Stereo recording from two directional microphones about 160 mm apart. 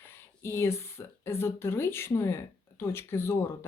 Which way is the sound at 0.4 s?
15° left (ahead or behind).